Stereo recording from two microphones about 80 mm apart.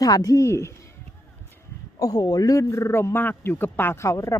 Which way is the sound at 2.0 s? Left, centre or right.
Left.